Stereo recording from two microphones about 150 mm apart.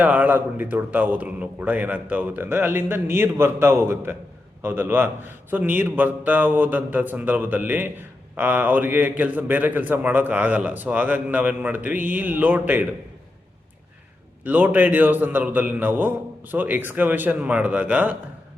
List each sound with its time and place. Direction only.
0.0 s a man's voice: 10° right (ahead or behind)
14.4 s a man's voice: 10° right (ahead or behind)